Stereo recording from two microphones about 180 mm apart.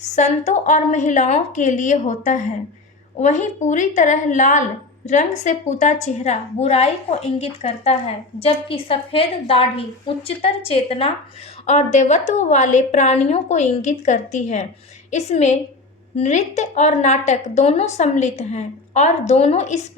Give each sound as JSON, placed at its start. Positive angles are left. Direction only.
{"t": 0.0, "sound": "a woman's voice", "side_deg": 40}